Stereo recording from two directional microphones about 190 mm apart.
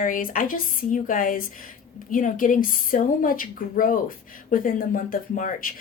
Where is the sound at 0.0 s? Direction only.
45° left (ahead or behind).